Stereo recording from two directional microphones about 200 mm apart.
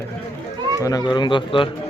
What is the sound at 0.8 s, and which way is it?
Speech, 20° left (ahead or behind).